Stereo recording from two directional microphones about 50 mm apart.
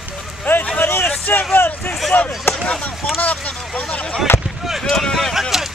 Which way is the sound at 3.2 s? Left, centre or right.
Left.